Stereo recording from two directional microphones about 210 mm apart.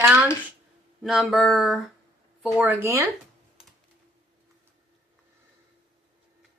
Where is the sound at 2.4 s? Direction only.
5° right (ahead or behind).